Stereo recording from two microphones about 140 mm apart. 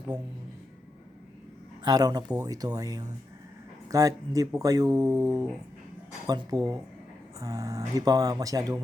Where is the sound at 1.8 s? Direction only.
30° right (ahead or behind).